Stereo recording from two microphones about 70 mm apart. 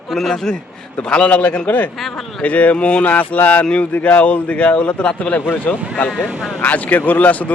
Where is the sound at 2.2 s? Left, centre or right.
Centre.